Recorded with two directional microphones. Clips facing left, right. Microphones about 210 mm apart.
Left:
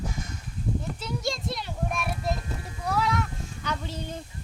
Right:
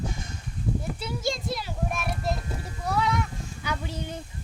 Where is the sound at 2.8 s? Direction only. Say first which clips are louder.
Even; centre (ahead or behind).